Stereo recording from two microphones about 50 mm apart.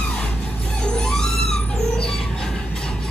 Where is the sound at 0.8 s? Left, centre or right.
Centre.